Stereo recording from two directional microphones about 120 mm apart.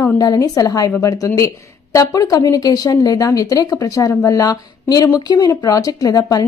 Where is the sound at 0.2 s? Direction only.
30° left (ahead or behind).